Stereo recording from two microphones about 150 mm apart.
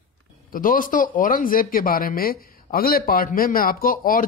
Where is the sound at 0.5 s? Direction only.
65° left (ahead or behind).